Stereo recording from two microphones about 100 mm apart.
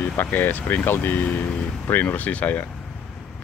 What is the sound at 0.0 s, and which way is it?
Speech, 20° left (ahead or behind).